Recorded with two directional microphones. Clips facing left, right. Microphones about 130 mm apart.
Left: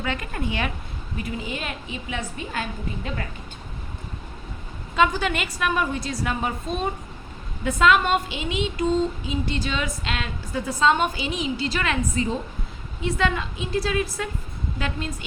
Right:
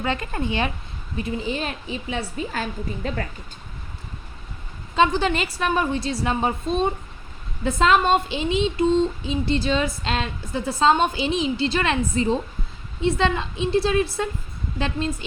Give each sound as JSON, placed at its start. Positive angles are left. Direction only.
{"t": 0.0, "sound": "a woman's voice", "side_deg": -30}
{"t": 4.9, "sound": "a woman's voice", "side_deg": -30}